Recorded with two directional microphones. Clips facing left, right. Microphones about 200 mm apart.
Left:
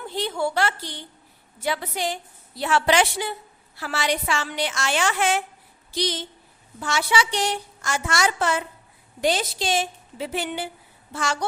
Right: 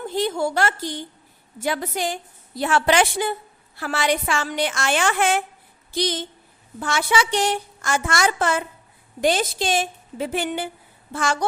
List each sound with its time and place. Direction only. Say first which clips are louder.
0.1 s a woman's voice: right 2 dB; 45° right (ahead or behind)